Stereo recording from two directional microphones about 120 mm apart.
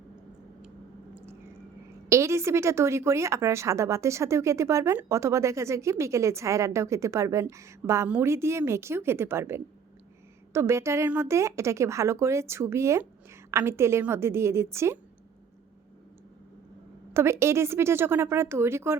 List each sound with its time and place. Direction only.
2.0 s a woman's voice: 25° right (ahead or behind)
17.2 s a woman's voice: 20° right (ahead or behind)